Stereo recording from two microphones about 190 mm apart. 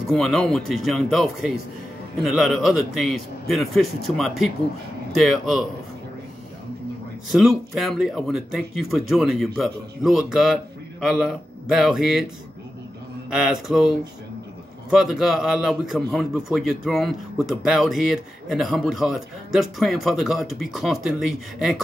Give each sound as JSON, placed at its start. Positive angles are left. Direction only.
{"t": 0.1, "sound": "a man's voice", "side_deg": 0}
{"t": 7.2, "sound": "a man's voice", "side_deg": 0}
{"t": 13.3, "sound": "a man's voice", "side_deg": 0}